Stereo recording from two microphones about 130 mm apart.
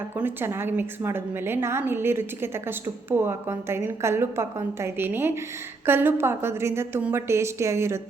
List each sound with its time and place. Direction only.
0.2 s a woman's voice: 15° right (ahead or behind)